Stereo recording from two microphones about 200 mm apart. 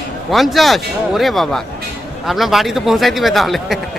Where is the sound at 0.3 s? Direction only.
Centre (ahead or behind).